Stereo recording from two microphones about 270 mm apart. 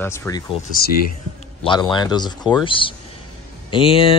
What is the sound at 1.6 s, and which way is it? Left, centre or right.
Speech, centre.